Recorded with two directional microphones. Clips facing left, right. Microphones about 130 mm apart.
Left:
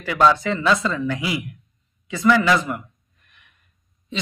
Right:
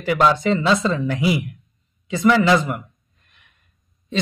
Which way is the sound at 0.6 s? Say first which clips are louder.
Right 2 dB; 25° right (ahead or behind).